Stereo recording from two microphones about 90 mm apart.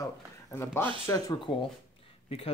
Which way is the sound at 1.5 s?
90° left.